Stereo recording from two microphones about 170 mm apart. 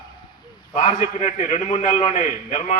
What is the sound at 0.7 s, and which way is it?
A man's voice, 45° left (ahead or behind).